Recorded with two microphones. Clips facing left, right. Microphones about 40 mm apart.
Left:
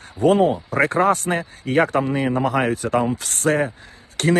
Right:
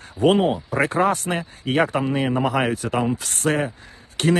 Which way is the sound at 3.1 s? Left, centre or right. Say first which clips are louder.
Even; left.